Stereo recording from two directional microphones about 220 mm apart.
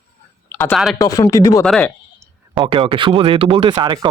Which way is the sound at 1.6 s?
5° left (ahead or behind).